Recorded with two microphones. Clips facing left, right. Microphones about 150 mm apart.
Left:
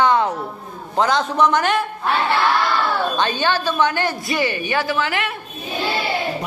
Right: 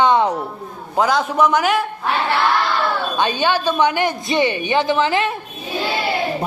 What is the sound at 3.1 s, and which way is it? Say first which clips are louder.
Speech: right 2 dB; 15° right (ahead or behind).